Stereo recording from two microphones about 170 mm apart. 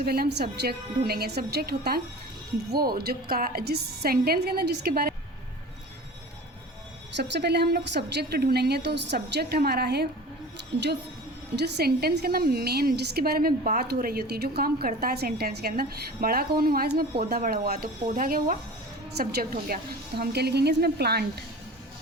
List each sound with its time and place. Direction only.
0.0 s a woman's voice: 65° right (ahead or behind)
7.2 s a woman's voice: 80° right